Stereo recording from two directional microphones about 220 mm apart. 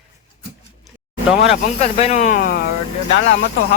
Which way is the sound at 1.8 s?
30° left (ahead or behind).